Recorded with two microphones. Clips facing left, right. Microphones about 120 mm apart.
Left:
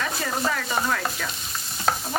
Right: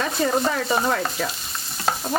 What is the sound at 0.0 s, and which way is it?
Stir, 25° right (ahead or behind).